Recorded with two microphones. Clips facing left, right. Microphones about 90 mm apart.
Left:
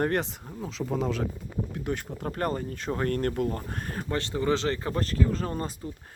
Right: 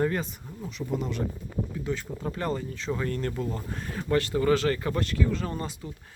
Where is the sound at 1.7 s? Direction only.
55° left (ahead or behind).